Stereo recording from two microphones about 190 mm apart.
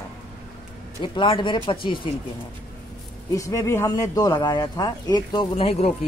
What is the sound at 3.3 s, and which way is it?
Speech, 15° left (ahead or behind).